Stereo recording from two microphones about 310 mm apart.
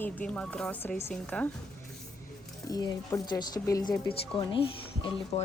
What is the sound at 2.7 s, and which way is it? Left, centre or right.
A woman's voice, centre.